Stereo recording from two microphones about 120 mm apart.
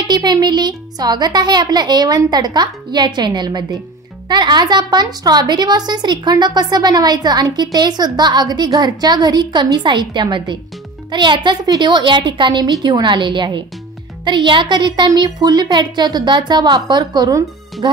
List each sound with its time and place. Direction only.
0.0 s a woman's voice: 35° right (ahead or behind)